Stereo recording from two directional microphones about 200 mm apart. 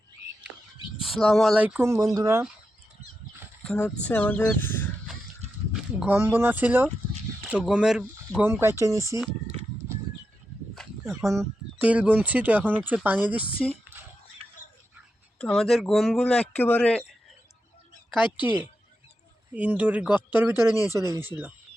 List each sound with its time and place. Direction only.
1.0 s speech: centre (ahead or behind)
3.6 s speech: 5° left (ahead or behind)
6.0 s speech: 10° right (ahead or behind)
9.0 s speech: 15° left (ahead or behind)
11.0 s speech: 15° right (ahead or behind)
15.4 s speech: centre (ahead or behind)
18.3 s speech: 10° right (ahead or behind)